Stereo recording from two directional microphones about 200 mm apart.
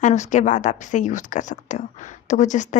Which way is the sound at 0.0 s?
35° left (ahead or behind).